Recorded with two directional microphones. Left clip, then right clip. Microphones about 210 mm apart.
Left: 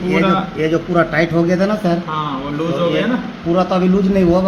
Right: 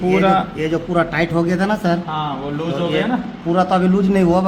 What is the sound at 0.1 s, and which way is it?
Speech, 45° right (ahead or behind).